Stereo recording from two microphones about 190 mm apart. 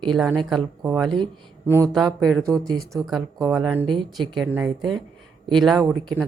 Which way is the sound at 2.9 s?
Centre (ahead or behind).